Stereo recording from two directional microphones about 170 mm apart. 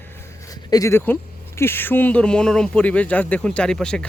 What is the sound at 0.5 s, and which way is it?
Speech, 20° left (ahead or behind).